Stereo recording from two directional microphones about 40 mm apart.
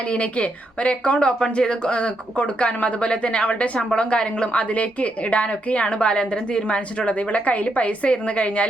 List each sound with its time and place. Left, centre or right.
0.0 s a woman's voice: left